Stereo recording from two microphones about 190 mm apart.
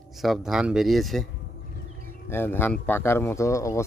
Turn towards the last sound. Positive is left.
turn(degrees=15)  # may be behind; listen again after turning